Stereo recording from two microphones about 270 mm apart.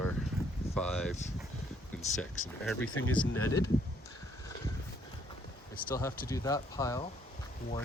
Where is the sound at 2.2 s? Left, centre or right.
Centre.